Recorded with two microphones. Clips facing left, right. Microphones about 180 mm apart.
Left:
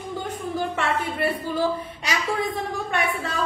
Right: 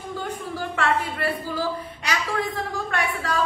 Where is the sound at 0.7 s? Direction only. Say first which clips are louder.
Right 1 dB; 20° left (ahead or behind).